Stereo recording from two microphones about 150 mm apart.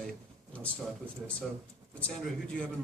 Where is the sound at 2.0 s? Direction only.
5° left (ahead or behind).